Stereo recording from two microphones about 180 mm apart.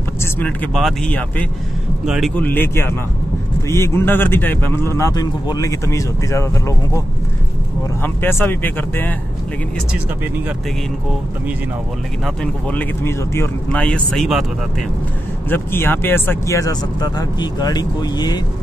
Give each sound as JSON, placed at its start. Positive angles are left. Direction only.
{"t": 0.2, "sound": "speech", "side_deg": 10}
{"t": 2.3, "sound": "speech", "side_deg": 10}
{"t": 8.0, "sound": "speech", "side_deg": 10}
{"t": 12.6, "sound": "speech", "side_deg": 10}
{"t": 15.5, "sound": "speech", "side_deg": 10}